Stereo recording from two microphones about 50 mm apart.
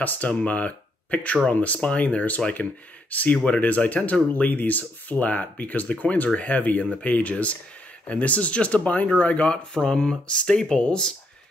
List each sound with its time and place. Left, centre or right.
0.0 s speech: left